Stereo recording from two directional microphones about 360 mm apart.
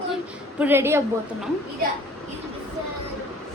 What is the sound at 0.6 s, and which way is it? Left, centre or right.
Speech, centre.